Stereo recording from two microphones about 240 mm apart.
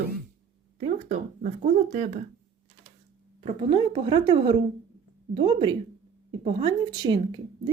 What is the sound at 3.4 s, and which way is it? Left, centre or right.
A woman's voice, right.